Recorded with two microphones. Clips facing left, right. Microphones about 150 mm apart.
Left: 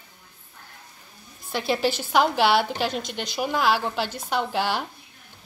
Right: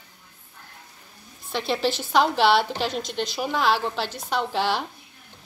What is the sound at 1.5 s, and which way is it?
A woman's voice, 5° left (ahead or behind).